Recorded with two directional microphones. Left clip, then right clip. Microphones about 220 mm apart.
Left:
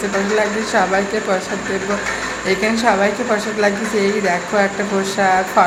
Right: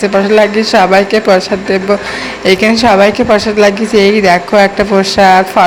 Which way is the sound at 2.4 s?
35° right (ahead or behind).